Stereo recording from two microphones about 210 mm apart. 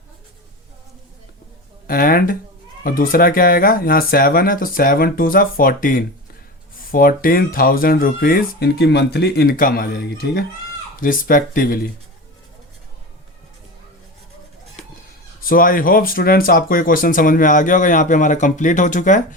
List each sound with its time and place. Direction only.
1.9 s speech: 45° left (ahead or behind)
11.0 s speech: 40° left (ahead or behind)
15.4 s speech: 45° left (ahead or behind)